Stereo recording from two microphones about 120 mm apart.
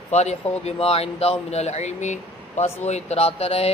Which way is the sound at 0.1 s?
65° left (ahead or behind).